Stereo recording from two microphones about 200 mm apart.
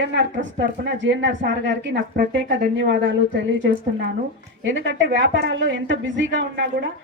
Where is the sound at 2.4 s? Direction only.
50° right (ahead or behind).